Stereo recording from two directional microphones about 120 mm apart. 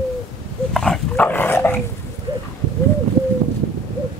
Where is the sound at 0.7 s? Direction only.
5° left (ahead or behind).